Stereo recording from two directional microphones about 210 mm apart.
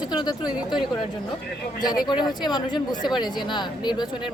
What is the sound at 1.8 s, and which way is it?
Speech, 20° left (ahead or behind).